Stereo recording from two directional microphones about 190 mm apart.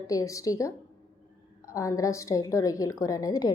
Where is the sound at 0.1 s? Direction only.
15° left (ahead or behind).